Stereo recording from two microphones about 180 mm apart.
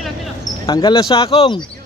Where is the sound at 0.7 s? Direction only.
20° left (ahead or behind).